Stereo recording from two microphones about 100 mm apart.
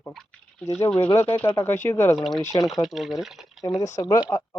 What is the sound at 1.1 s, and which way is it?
Speech, 25° left (ahead or behind).